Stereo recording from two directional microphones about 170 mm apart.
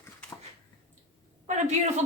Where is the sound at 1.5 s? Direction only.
45° right (ahead or behind).